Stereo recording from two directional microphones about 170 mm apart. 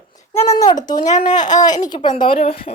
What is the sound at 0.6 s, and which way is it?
Speech, 25° left (ahead or behind).